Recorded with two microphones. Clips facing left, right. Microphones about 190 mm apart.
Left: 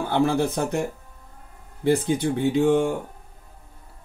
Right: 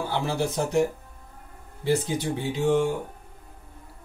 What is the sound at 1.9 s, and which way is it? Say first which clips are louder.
Speech: left 4 dB; 55° left (ahead or behind).